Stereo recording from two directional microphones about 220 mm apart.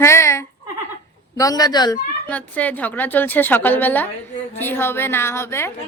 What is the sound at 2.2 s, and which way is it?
A woman's voice, 5° left (ahead or behind).